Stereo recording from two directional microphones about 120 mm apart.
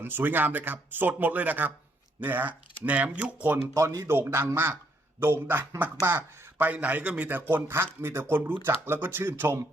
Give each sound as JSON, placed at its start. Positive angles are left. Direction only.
{"t": 0.0, "sound": "speech", "side_deg": -15}
{"t": 3.8, "sound": "a man's voice", "side_deg": -25}